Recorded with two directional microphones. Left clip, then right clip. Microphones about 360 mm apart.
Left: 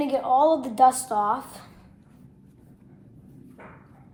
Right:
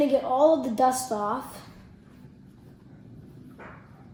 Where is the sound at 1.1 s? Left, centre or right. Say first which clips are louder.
Left 5 dB; centre.